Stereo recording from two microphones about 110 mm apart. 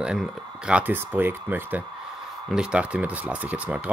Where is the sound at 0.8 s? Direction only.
20° right (ahead or behind).